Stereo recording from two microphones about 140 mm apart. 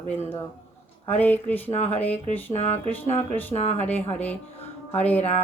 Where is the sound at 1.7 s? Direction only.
45° left (ahead or behind).